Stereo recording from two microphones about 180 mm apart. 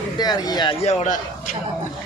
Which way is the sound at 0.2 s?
20° left (ahead or behind).